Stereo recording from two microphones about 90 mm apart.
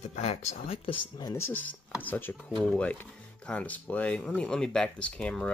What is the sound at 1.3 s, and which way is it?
Speech, 25° left (ahead or behind).